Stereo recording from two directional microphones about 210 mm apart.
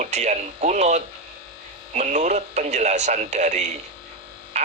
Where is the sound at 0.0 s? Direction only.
35° right (ahead or behind).